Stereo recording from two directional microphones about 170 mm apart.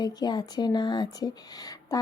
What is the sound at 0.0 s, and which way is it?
Speech, 25° left (ahead or behind).